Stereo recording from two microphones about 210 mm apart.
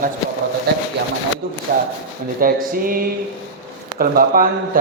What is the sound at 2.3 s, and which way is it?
A man's voice, 40° right (ahead or behind).